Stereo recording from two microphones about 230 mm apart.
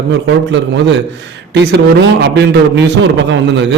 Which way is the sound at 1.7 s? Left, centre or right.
Right.